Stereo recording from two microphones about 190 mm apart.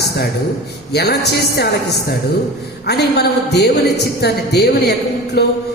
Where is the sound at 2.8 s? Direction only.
60° left (ahead or behind).